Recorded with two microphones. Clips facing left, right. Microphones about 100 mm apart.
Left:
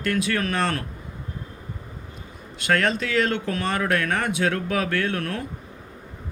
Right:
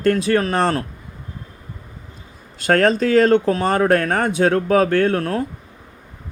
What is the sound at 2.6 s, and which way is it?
Speech, 40° right (ahead or behind).